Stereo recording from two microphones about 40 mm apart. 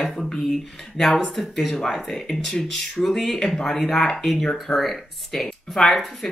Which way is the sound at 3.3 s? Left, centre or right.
Left.